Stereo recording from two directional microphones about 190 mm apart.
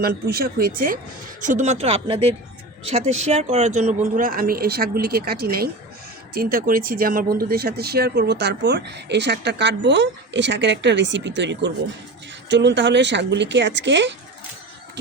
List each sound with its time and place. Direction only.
0.0 s speech: 55° right (ahead or behind); by 14.1 s 70° right (ahead or behind)